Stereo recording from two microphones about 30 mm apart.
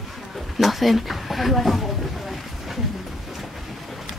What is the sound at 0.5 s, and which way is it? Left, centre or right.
Speech, centre.